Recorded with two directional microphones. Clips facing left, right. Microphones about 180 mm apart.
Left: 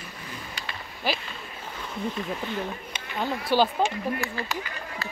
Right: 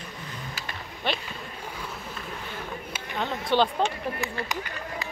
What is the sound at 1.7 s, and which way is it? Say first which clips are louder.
Wild animals: even; 10° right (ahead or behind).